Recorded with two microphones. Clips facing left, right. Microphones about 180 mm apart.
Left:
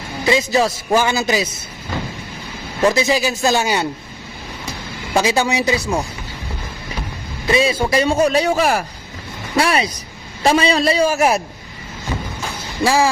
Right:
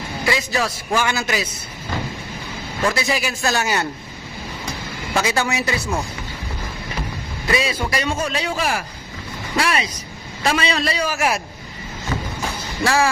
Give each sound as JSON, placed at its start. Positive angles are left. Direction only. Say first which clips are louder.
{"t": 0.3, "sound": "a man's voice", "louder": "left 6 dB", "side_deg": 20}
{"t": 2.8, "sound": "a man's voice", "louder": "left 6 dB", "side_deg": 20}
{"t": 5.2, "sound": "speech", "louder": "left 5 dB", "side_deg": 15}
{"t": 7.5, "sound": "a man's voice", "louder": "left 6 dB", "side_deg": 25}
{"t": 8.2, "sound": "a man's voice", "louder": "left 8 dB", "side_deg": 40}
{"t": 9.6, "sound": "a man's voice", "louder": "left 4 dB", "side_deg": 35}
{"t": 12.8, "sound": "speech", "louder": "left 3 dB", "side_deg": 15}